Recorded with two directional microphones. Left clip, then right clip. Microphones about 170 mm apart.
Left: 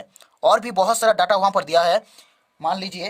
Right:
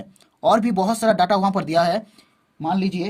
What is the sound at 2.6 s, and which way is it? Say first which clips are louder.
Speech: even; 55° left (ahead or behind).